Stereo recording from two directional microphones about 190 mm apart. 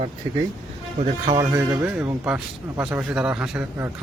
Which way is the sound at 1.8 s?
10° right (ahead or behind).